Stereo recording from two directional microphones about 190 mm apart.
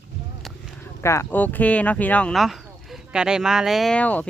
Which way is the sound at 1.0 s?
10° left (ahead or behind).